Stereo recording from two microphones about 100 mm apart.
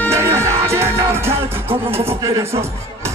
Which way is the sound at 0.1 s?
30° right (ahead or behind).